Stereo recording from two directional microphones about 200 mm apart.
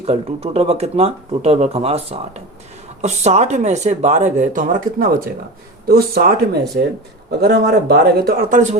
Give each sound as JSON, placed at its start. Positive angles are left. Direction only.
{"t": 0.0, "sound": "speech", "side_deg": -30}